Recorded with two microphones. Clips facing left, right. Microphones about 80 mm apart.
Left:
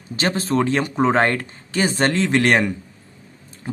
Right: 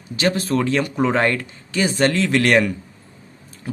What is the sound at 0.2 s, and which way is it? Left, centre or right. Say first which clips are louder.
Speech: even; left.